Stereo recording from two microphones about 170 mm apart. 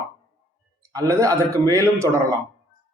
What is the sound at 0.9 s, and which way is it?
Speech, 20° right (ahead or behind).